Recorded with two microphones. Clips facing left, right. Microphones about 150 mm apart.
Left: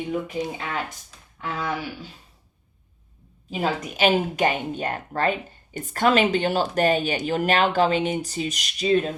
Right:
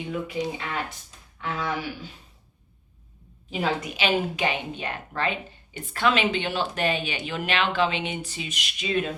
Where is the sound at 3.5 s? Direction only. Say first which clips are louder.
Left 1 dB; 40° left (ahead or behind).